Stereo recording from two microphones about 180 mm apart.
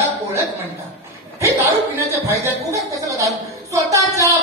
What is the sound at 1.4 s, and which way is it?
A woman's voice, 15° right (ahead or behind).